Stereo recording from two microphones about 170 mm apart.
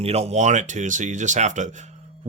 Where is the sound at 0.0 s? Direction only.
40° right (ahead or behind).